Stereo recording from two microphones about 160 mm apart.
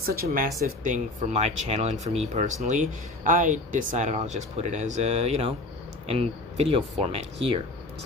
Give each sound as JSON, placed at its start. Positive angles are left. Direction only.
{"t": 0.0, "sound": "speech", "side_deg": -65}
{"t": 0.7, "sound": "speech", "side_deg": -55}